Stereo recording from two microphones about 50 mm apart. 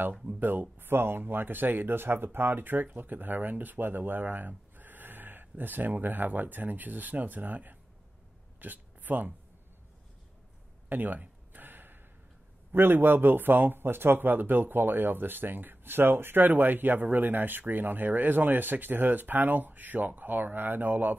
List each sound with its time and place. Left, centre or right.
0.1 s speech: centre
0.4 s speech: right
10.9 s a sound: right
12.7 s speech: right